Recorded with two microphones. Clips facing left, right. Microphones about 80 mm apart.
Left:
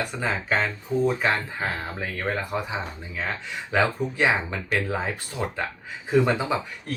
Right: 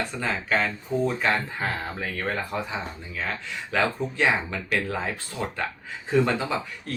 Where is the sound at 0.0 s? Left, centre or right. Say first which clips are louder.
Left 1 dB; centre.